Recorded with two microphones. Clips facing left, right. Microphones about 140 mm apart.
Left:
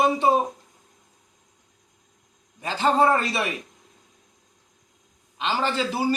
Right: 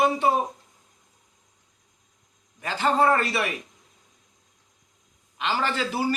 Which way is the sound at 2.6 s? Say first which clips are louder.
Left 2 dB; 20° left (ahead or behind).